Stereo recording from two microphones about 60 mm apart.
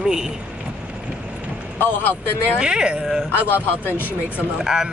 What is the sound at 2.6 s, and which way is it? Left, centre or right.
Speech, centre.